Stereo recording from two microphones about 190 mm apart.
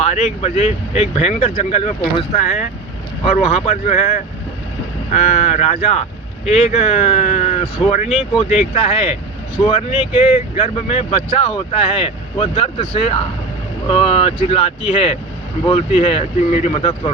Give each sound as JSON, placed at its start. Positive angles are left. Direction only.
{"t": 0.0, "sound": "speech", "side_deg": 35}